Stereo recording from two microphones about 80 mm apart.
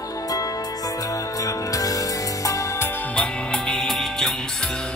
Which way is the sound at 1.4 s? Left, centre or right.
Left.